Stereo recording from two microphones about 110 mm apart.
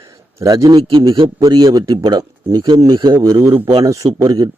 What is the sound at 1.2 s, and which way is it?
Speech, 50° right (ahead or behind).